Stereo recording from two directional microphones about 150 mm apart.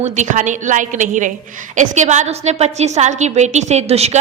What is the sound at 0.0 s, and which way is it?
A woman's voice, 55° right (ahead or behind).